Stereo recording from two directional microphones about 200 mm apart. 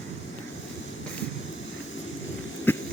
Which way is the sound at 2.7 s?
10° left (ahead or behind).